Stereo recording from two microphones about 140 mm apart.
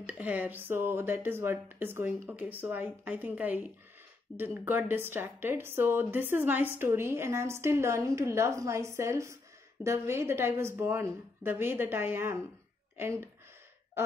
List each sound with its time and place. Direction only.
0.0 s a woman's voice: 10° right (ahead or behind)
4.3 s speech: 10° left (ahead or behind)
4.6 s a woman's voice: 15° right (ahead or behind)